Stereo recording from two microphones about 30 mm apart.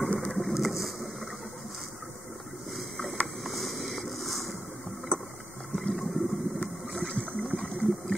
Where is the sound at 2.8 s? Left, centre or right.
Centre.